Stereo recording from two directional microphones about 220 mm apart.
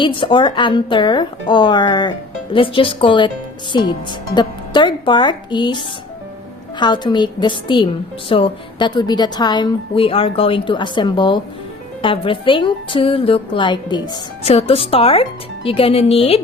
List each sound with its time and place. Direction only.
0.0 s a woman's voice: 20° left (ahead or behind)